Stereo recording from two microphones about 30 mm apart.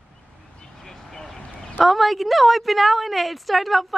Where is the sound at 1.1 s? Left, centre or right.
Centre.